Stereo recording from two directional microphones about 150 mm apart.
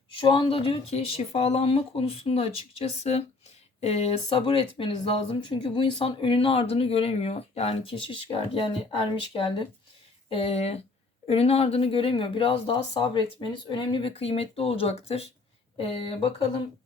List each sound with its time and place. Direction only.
0.2 s speech: 35° left (ahead or behind)